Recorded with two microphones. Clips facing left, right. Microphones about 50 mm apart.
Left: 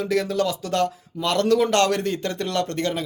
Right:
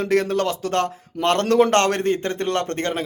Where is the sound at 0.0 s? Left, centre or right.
Right.